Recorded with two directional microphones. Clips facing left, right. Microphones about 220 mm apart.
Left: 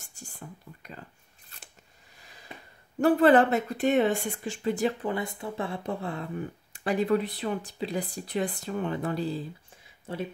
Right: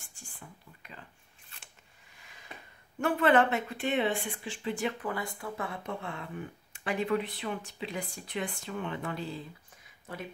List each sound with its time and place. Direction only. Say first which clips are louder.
0.0 s whispering: left 6 dB; 40° left (ahead or behind)
1.5 s scissors: left 4 dB; 40° left (ahead or behind)
2.2 s a sound: left 3 dB; 35° left (ahead or behind)
3.0 s speech: left 6 dB; 35° left (ahead or behind)